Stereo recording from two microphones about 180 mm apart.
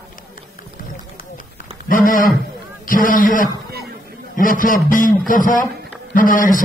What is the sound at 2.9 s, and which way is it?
A man's voice, 50° left (ahead or behind).